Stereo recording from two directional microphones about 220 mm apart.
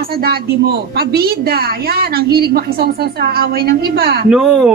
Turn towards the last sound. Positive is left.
turn(degrees=-5)  # may be behind; listen again after turning